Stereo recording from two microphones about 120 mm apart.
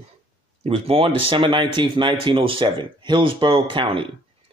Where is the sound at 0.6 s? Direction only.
50° right (ahead or behind).